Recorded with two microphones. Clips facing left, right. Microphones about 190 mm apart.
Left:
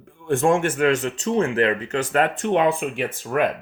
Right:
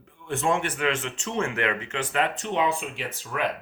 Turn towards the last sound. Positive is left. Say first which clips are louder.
# left 8 dB
turn(degrees=50)  # may be behind; listen again after turning